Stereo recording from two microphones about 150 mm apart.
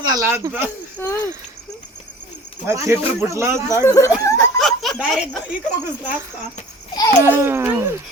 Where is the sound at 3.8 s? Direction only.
20° left (ahead or behind).